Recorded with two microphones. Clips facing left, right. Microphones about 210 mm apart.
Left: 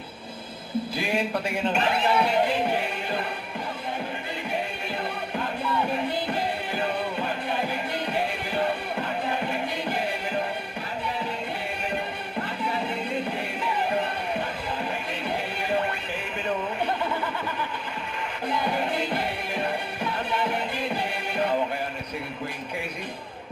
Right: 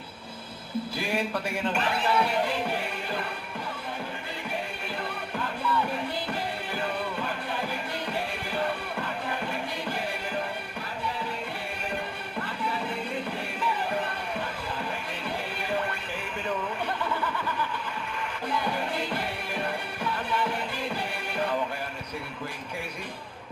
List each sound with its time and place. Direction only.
0.9 s speech: 20° left (ahead or behind)
6.3 s music: 20° left (ahead or behind)
18.4 s music: 20° left (ahead or behind)